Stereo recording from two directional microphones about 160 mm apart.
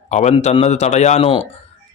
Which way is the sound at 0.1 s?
45° left (ahead or behind).